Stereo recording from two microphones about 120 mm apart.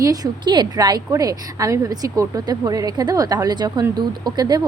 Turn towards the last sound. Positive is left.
turn(degrees=-30)  # may be behind; listen again after turning